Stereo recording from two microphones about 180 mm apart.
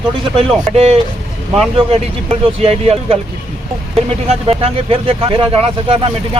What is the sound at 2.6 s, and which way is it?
Speech, 35° right (ahead or behind).